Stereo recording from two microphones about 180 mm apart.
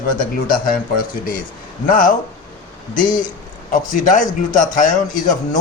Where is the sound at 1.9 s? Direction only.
50° left (ahead or behind).